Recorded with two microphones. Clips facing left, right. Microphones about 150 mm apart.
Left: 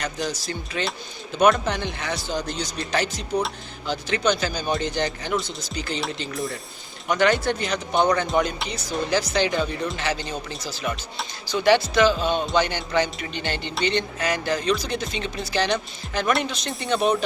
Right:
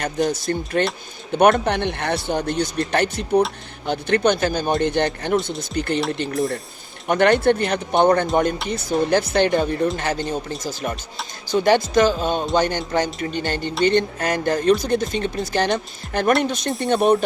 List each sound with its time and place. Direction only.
0.0 s speech: 50° right (ahead or behind)